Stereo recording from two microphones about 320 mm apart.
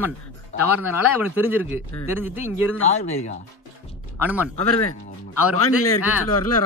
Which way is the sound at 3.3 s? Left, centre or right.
Left.